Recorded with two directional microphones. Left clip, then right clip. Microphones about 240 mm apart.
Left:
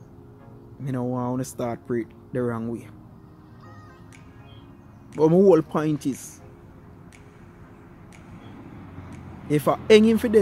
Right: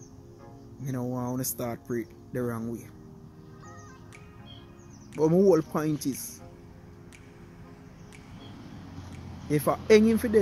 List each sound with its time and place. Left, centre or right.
0.8 s speech: centre
5.1 s speech: centre
5.9 s speech: left
9.5 s speech: centre